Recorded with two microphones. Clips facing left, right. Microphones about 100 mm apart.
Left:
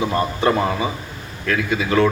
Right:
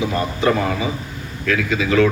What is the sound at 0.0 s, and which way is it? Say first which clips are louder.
Speech: even; 40° left (ahead or behind).